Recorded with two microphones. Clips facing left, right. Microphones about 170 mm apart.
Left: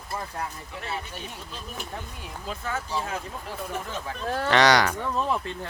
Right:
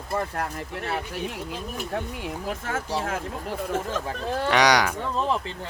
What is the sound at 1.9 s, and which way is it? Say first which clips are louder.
Speech: right 8 dB; 80° right.